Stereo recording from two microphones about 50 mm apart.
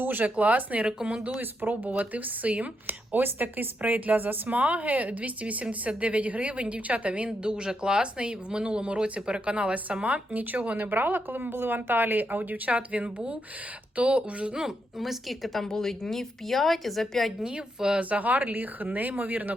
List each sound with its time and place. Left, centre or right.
0.0 s speech: right
0.9 s a woman's voice: centre
1.4 s speech: right
1.9 s speech: right
7.3 s speech: centre
14.5 s a woman's voice: centre
17.4 s a woman's voice: centre
18.1 s speech: right